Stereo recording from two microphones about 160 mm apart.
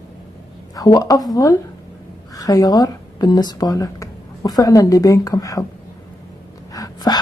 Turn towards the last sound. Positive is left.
turn(degrees=25)  # may be behind; listen again after turning